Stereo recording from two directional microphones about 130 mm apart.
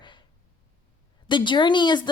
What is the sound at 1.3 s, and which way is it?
Speech, 35° left (ahead or behind).